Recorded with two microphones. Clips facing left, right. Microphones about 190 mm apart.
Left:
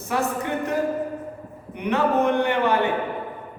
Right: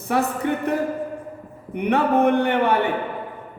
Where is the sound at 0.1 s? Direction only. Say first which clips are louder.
Right 3 dB; 60° right (ahead or behind).